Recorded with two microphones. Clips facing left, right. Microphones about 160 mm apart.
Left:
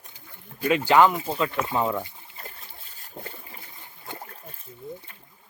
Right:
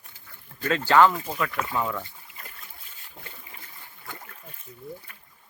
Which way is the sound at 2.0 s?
25° left (ahead or behind).